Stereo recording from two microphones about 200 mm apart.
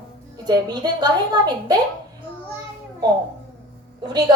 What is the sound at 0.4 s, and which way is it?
A woman's voice, 20° right (ahead or behind).